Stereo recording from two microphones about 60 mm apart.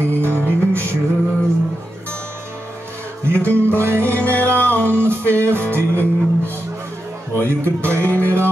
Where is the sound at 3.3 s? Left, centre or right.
Left.